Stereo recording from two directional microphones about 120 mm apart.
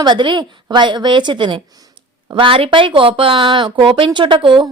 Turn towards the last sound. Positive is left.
turn(degrees=-45)  # may be behind; listen again after turning